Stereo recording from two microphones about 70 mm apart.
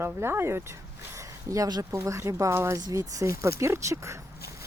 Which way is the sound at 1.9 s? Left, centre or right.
Right.